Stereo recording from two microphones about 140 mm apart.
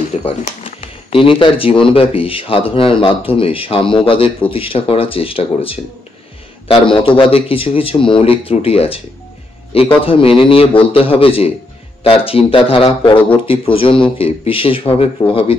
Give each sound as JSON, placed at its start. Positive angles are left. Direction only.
{"t": 1.1, "sound": "speech", "side_deg": 40}
{"t": 10.0, "sound": "speech", "side_deg": 40}